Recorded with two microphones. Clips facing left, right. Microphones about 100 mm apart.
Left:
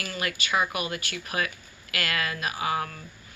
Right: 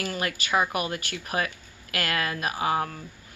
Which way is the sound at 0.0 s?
40° right (ahead or behind).